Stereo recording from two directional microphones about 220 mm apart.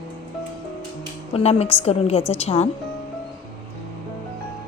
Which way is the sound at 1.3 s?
25° left (ahead or behind).